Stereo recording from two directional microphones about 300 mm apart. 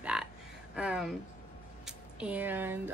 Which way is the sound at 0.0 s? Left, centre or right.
Centre.